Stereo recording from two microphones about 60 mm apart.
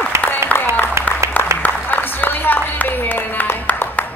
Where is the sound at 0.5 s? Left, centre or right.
Left.